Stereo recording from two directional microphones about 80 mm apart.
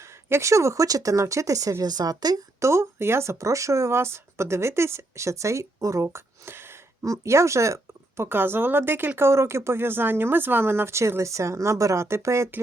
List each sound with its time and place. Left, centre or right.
0.0 s speech: right
2.6 s speech: right